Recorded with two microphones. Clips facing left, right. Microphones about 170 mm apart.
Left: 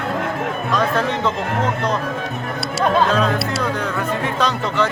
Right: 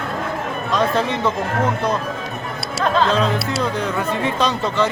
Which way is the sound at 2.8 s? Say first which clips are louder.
Left 1 dB; 10° left (ahead or behind).